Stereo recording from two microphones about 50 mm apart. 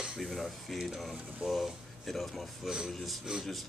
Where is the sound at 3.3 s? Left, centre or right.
Centre.